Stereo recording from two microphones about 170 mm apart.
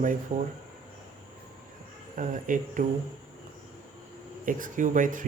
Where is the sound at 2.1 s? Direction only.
50° right (ahead or behind).